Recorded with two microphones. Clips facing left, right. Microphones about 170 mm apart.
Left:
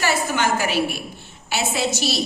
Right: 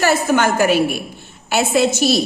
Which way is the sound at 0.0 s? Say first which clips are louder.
Right 6 dB; 50° right (ahead or behind).